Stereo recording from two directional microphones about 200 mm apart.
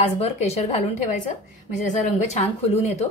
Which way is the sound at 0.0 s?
30° left (ahead or behind).